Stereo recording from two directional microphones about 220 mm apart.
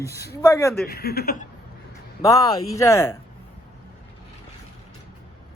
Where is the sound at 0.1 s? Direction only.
45° left (ahead or behind).